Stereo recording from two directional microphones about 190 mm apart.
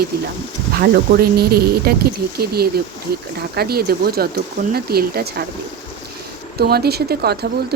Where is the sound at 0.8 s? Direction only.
55° right (ahead or behind).